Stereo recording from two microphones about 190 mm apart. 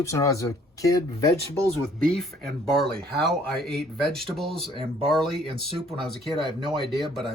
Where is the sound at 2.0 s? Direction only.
Centre (ahead or behind).